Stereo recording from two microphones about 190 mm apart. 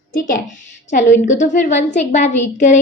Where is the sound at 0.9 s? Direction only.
40° left (ahead or behind).